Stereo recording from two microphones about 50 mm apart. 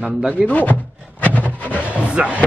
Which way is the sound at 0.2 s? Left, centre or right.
Right.